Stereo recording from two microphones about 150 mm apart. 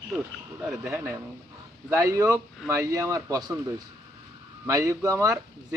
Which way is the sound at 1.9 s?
20° right (ahead or behind).